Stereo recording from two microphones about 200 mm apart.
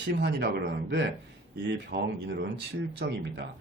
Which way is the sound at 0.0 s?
60° right (ahead or behind).